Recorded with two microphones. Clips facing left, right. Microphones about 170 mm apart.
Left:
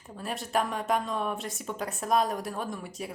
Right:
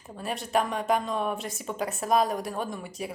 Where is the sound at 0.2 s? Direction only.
Centre (ahead or behind).